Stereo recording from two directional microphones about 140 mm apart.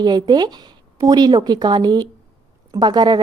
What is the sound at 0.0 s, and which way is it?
A woman's voice, 30° right (ahead or behind).